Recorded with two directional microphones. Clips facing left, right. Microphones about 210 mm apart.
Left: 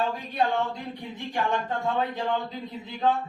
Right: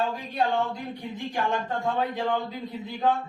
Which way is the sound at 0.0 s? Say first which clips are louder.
Even; centre (ahead or behind).